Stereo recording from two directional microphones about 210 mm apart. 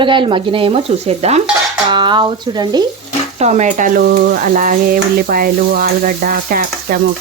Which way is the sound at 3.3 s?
35° right (ahead or behind).